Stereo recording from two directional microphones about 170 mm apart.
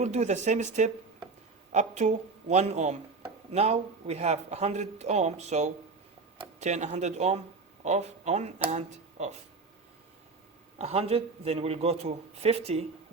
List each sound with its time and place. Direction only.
0.0 s speech: 40° right (ahead or behind)
10.8 s speech: 40° right (ahead or behind)